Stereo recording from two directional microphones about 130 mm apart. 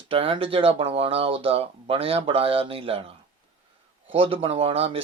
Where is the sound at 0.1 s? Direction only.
45° right (ahead or behind).